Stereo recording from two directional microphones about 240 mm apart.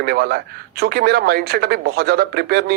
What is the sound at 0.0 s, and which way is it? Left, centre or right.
Speech, right.